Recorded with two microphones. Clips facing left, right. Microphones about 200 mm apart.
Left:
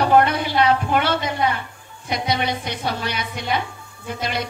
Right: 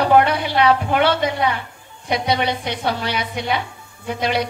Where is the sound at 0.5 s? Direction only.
55° right (ahead or behind).